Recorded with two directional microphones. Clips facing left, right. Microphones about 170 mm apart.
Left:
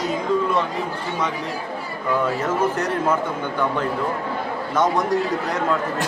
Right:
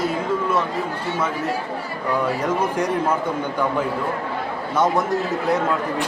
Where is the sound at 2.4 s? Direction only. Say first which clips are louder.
Even; 10° right (ahead or behind).